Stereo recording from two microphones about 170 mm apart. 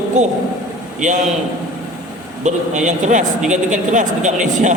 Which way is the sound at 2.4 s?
45° right (ahead or behind).